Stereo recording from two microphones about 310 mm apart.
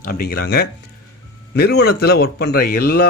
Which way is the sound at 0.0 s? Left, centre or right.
Left.